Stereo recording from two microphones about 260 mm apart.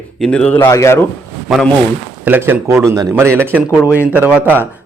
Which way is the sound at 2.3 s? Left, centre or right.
Centre.